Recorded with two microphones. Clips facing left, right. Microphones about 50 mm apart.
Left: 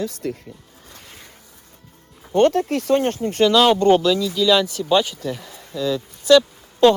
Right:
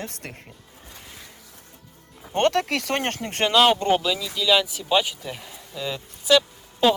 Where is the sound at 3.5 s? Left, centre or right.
Centre.